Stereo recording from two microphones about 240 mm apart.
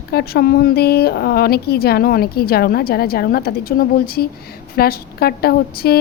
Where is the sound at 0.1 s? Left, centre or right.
Left.